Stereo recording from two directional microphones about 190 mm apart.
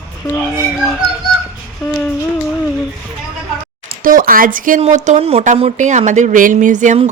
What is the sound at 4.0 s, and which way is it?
Speech, 45° right (ahead or behind).